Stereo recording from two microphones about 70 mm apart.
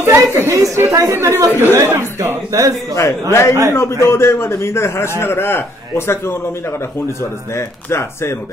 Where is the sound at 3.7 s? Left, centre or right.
Left.